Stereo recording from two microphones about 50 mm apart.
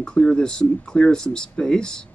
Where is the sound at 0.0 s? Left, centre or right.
Centre.